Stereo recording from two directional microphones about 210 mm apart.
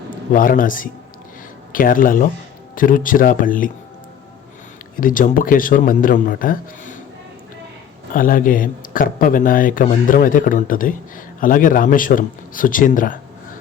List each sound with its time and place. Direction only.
0.1 s a man's voice: 40° left (ahead or behind)
4.9 s speech: 40° left (ahead or behind)
8.1 s speech: 40° left (ahead or behind)